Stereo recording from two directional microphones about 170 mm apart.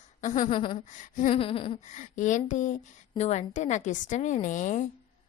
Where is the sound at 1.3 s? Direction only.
35° left (ahead or behind).